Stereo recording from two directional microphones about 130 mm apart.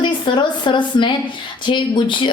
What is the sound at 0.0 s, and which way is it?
Speech, 35° left (ahead or behind).